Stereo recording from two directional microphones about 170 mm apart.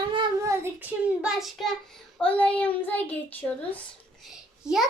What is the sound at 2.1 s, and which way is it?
A child's voice, 5° left (ahead or behind).